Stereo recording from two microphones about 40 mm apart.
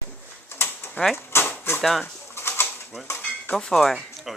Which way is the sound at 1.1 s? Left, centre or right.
Left.